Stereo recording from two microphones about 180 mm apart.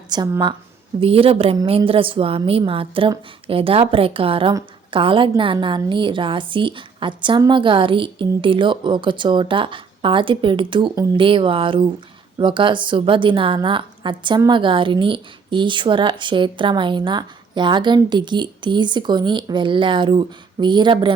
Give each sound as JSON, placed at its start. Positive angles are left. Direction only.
{"t": 0.1, "sound": "a woman's voice", "side_deg": -25}